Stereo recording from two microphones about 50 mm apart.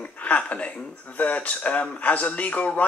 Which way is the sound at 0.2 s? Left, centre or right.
Left.